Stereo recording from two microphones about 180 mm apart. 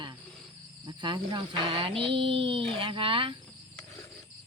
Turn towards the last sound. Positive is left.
turn(degrees=-30)  # may be behind; listen again after turning